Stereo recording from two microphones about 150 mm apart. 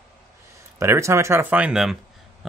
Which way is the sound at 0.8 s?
20° right (ahead or behind).